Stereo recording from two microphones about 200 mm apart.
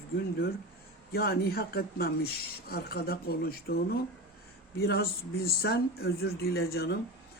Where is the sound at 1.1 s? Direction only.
50° left (ahead or behind).